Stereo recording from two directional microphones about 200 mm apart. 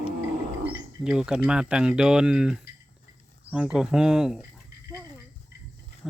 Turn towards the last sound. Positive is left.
turn(degrees=0)  # may be behind; listen again after turning